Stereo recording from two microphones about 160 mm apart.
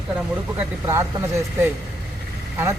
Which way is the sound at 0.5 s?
20° right (ahead or behind).